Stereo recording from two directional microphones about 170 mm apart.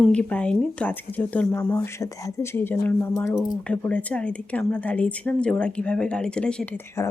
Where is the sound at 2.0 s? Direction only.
20° left (ahead or behind).